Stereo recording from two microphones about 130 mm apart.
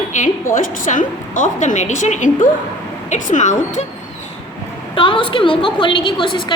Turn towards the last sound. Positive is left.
turn(degrees=40)  # may be behind; listen again after turning